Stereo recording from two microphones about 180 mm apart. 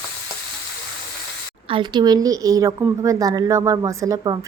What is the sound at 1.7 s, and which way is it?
A woman's voice, 25° right (ahead or behind).